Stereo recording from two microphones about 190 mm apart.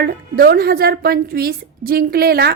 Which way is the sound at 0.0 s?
50° right (ahead or behind).